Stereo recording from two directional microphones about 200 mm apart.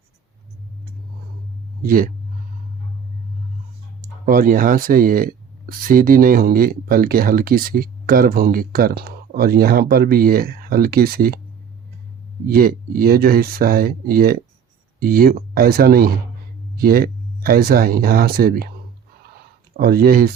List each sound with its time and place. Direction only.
1.8 s speech: 45° right (ahead or behind)
4.0 s speech: 45° right (ahead or behind)
12.5 s speech: 45° right (ahead or behind)
19.3 s a sound: 50° right (ahead or behind)